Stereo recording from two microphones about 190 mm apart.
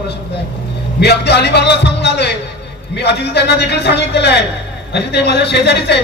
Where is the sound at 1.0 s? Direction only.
60° left (ahead or behind).